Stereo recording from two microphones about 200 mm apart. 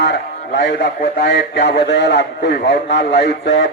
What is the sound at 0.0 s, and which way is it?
Speech, 60° left (ahead or behind).